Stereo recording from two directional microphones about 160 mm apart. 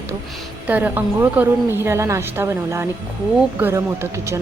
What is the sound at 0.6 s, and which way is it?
A woman's voice, 10° right (ahead or behind).